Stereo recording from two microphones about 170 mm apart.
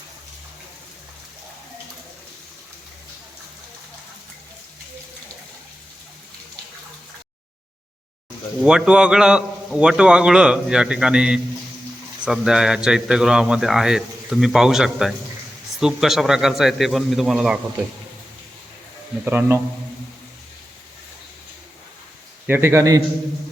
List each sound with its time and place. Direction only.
8.5 s speech: 5° right (ahead or behind)
19.2 s speech: 10° right (ahead or behind)
22.4 s speech: 15° right (ahead or behind)